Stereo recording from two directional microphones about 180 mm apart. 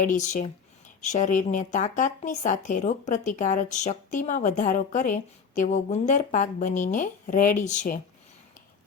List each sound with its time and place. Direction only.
0.0 s speech: 45° left (ahead or behind)